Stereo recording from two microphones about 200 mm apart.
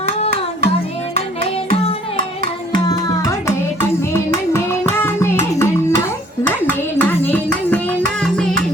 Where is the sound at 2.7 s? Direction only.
15° left (ahead or behind).